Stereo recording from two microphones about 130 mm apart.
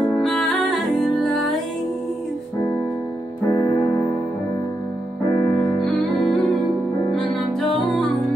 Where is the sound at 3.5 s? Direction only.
25° left (ahead or behind).